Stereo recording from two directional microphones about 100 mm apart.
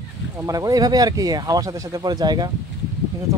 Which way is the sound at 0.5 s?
35° right (ahead or behind).